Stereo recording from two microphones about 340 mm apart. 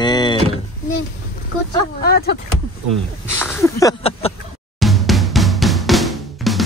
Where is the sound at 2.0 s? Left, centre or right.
Left.